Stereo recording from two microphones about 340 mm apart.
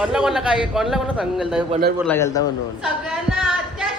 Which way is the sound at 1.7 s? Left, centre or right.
Right.